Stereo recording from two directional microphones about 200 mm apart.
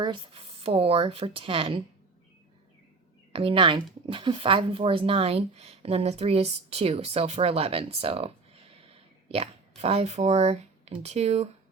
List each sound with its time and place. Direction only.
0.0 s speech: 25° right (ahead or behind)
3.3 s speech: 25° right (ahead or behind)